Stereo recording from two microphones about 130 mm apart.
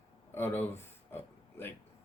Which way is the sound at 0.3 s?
15° left (ahead or behind).